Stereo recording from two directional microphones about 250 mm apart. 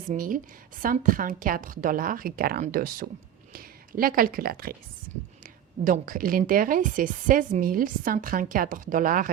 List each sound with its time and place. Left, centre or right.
0.1 s speech: right